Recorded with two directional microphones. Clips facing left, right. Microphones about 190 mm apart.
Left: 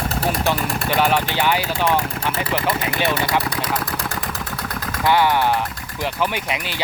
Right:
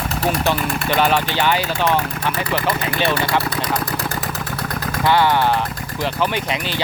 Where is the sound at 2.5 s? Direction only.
25° left (ahead or behind); by 4.4 s centre (ahead or behind).